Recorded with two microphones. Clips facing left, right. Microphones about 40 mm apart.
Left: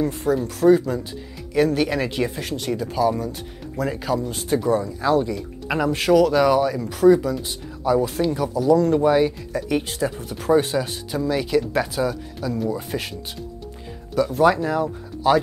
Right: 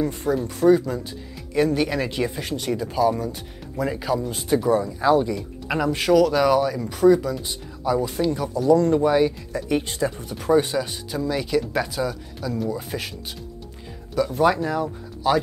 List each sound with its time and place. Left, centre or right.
0.0 s speech: centre
14.1 s speech: centre